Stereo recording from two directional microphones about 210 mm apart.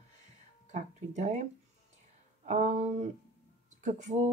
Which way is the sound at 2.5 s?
35° right (ahead or behind).